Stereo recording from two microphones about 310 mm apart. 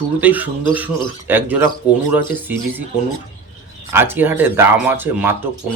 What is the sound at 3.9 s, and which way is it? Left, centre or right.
Speech, centre.